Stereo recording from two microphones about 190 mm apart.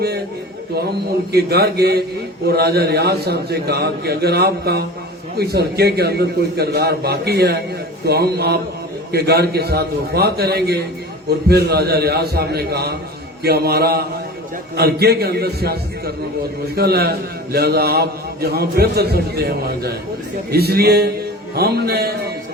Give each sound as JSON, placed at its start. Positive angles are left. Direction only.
{"t": 1.3, "sound": "a man's voice", "side_deg": -55}